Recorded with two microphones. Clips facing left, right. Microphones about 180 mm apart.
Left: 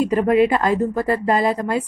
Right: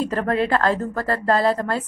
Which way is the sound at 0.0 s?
15° left (ahead or behind).